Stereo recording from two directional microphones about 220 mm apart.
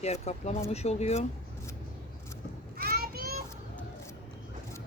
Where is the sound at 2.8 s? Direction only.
45° right (ahead or behind).